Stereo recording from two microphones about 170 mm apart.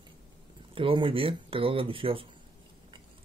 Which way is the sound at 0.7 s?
30° right (ahead or behind).